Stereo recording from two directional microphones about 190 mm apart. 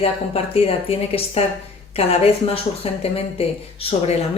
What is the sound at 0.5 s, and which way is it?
A woman's voice, 30° left (ahead or behind).